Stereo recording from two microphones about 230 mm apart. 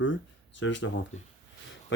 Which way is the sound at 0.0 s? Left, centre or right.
Left.